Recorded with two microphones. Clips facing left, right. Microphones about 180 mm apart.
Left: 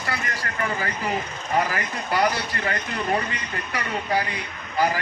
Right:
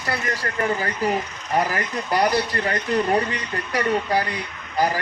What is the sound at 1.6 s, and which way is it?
Speech, 40° right (ahead or behind).